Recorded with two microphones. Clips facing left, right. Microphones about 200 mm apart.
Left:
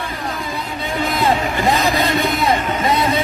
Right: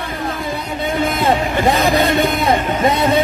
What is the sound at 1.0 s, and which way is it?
A man's voice, 50° right (ahead or behind).